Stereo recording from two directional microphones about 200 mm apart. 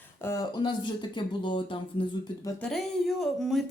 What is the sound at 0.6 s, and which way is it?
Speech, 25° left (ahead or behind).